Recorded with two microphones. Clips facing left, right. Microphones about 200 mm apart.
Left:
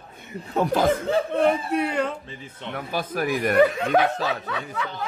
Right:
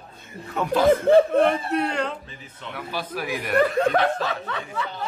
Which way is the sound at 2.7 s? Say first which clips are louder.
Left 3 dB; 45° left (ahead or behind).